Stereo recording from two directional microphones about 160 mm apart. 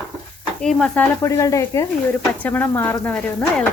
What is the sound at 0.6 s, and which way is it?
Speech, 5° left (ahead or behind).